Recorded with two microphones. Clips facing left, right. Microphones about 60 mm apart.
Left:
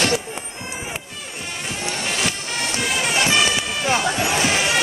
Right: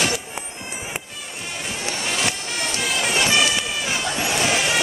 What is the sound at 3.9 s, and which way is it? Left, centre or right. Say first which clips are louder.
Music: left 5 dB; left.